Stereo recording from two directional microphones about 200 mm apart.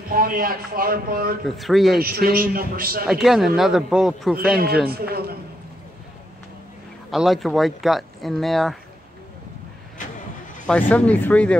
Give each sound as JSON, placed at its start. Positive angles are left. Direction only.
{"t": 0.1, "sound": "a man's voice", "side_deg": -45}
{"t": 1.6, "sound": "speech", "side_deg": 0}
{"t": 2.0, "sound": "a man's voice", "side_deg": -50}
{"t": 3.1, "sound": "speech", "side_deg": 0}
{"t": 4.8, "sound": "a man's voice", "side_deg": -50}
{"t": 7.1, "sound": "speech", "side_deg": 0}
{"t": 10.7, "sound": "speech", "side_deg": 5}